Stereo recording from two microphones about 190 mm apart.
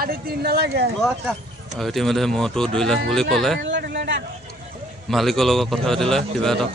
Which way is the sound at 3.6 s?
65° right (ahead or behind).